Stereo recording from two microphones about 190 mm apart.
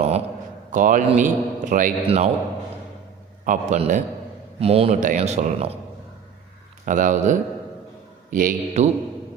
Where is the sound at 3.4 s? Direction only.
40° right (ahead or behind).